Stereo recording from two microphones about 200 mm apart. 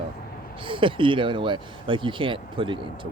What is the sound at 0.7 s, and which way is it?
Speech, 25° right (ahead or behind).